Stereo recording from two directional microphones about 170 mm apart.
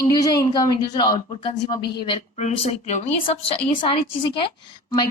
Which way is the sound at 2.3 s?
40° left (ahead or behind).